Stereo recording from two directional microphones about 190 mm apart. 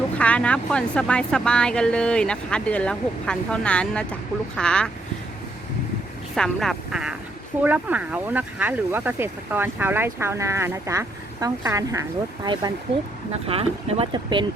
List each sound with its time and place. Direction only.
0.2 s speech: 5° left (ahead or behind)
6.3 s speech: centre (ahead or behind); by 12.0 s 15° right (ahead or behind)
13.3 s speech: 30° right (ahead or behind)